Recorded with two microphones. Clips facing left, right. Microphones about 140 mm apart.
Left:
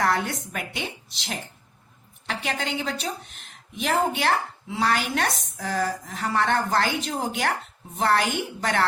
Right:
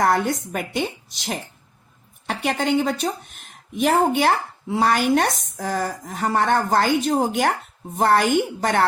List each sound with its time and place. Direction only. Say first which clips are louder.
0.0 s a woman's voice: right 5 dB; 45° right (ahead or behind)